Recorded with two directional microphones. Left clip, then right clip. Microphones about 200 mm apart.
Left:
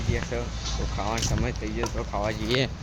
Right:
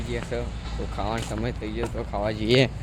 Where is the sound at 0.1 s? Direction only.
20° right (ahead or behind).